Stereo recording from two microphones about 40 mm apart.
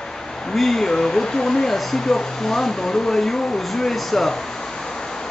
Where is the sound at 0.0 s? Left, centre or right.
Centre.